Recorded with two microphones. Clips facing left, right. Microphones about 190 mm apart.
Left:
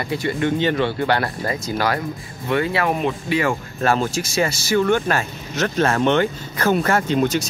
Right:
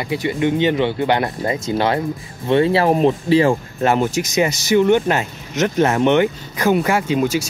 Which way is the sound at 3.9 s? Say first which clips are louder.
Right 3 dB; 15° right (ahead or behind).